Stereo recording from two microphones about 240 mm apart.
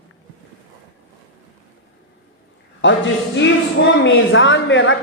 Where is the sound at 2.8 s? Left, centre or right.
Left.